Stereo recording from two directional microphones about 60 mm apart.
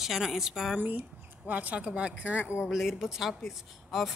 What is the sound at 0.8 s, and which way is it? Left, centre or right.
A woman's voice, right.